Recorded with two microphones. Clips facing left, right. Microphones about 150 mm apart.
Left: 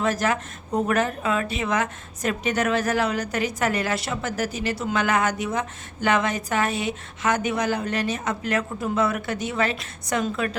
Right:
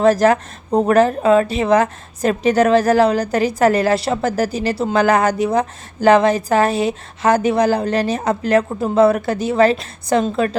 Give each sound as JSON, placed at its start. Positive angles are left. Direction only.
{"t": 0.0, "sound": "a woman's voice", "side_deg": -35}